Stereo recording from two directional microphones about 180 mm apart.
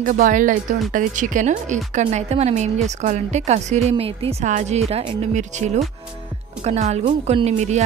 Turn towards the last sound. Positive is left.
turn(degrees=-40)  # may be behind; listen again after turning